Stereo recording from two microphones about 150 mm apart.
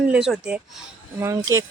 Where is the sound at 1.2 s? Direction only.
20° right (ahead or behind).